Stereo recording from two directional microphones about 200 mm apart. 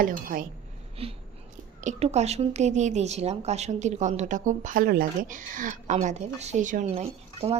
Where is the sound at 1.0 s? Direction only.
30° right (ahead or behind).